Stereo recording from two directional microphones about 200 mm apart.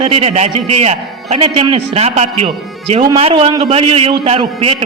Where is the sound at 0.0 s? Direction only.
30° right (ahead or behind).